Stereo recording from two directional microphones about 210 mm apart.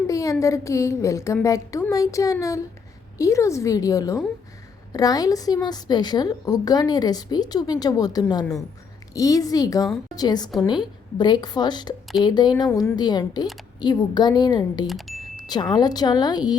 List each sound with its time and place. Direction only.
0.1 s a woman's voice: 15° left (ahead or behind)
14.8 s a sound: centre (ahead or behind)
15.4 s a woman's voice: 20° left (ahead or behind)